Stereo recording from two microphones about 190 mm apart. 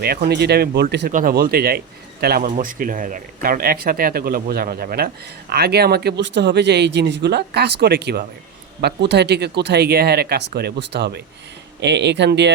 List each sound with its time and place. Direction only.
0.0 s speech: 55° right (ahead or behind)